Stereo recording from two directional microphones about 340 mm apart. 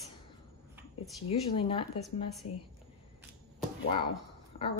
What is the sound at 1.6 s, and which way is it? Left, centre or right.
Speech, centre.